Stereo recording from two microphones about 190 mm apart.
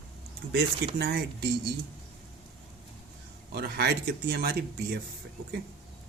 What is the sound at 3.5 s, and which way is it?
Speech, 60° right (ahead or behind).